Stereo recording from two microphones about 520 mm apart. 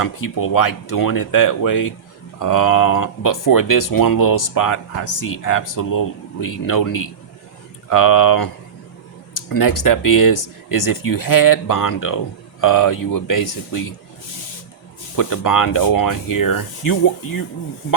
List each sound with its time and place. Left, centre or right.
0.0 s speech: left
15.1 s speech: left